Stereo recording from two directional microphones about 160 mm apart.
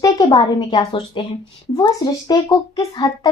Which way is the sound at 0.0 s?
25° left (ahead or behind).